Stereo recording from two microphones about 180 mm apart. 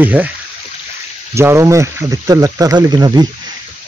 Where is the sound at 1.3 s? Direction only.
15° right (ahead or behind).